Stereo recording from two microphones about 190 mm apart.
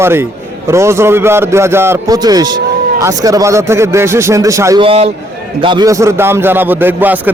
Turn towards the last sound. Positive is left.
turn(degrees=-10)  # may be behind; listen again after turning